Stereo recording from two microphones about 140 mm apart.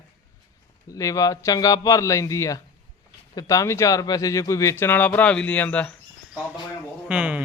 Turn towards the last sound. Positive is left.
turn(degrees=-10)  # may be behind; listen again after turning